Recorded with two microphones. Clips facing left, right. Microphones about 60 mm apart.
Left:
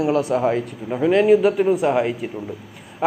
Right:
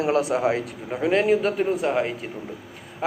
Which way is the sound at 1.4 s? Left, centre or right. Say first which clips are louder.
Left 6 dB; centre.